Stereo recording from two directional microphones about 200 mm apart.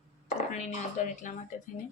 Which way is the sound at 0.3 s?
35° left (ahead or behind).